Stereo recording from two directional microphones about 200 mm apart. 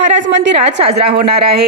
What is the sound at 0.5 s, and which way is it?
Speech, 30° right (ahead or behind).